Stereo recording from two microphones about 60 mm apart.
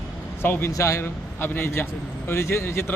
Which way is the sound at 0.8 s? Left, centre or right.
Left.